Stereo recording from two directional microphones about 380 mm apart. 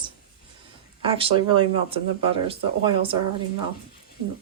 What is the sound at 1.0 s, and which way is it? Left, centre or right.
A woman's voice, centre.